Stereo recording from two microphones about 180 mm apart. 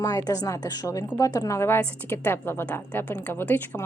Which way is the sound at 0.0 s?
20° left (ahead or behind).